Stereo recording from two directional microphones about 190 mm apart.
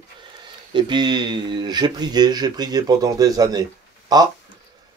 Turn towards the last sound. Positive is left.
turn(degrees=-20)  # may be behind; listen again after turning